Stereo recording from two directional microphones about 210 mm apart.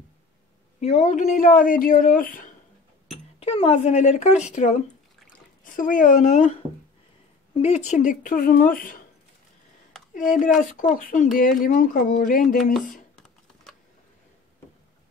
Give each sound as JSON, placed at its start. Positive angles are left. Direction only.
{"t": 0.7, "sound": "speech", "side_deg": 30}
{"t": 3.3, "sound": "speech", "side_deg": 25}
{"t": 7.5, "sound": "speech", "side_deg": 30}
{"t": 10.6, "sound": "speech", "side_deg": 40}